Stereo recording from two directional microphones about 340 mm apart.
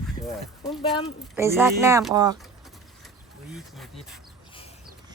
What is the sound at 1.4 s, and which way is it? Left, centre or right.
Speech, centre.